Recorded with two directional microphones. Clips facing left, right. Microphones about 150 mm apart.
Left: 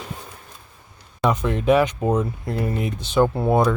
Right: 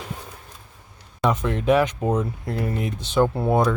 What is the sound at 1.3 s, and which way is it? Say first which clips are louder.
Speech: left 2 dB; 15° left (ahead or behind).